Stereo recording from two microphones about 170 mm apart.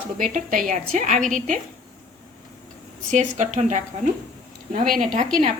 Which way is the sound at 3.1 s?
45° right (ahead or behind).